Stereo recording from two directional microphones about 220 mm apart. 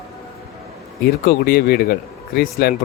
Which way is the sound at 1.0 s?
45° left (ahead or behind).